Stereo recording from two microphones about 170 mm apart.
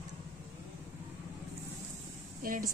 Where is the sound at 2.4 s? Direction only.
55° right (ahead or behind).